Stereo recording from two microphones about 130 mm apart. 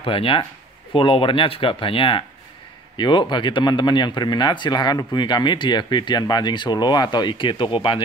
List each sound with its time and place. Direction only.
0.0 s speech: 45° left (ahead or behind)